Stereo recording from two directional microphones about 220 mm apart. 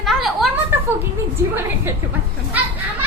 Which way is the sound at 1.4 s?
10° right (ahead or behind).